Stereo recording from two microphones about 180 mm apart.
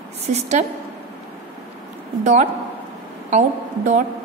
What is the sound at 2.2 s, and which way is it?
A woman's voice, 40° right (ahead or behind).